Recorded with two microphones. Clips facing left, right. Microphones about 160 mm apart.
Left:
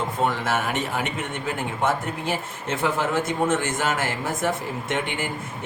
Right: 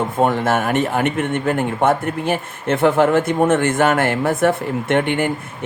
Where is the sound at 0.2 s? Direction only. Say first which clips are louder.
Right 8 dB; 55° right (ahead or behind).